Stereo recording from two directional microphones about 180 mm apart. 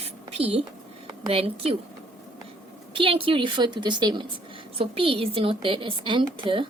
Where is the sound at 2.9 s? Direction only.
30° right (ahead or behind).